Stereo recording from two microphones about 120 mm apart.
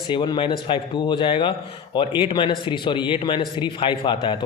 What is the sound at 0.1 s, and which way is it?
Speech, 40° left (ahead or behind).